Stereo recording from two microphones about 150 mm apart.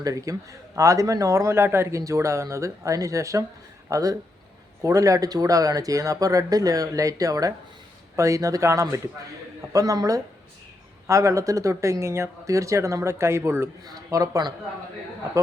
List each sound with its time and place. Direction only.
0.0 s speech: 20° right (ahead or behind)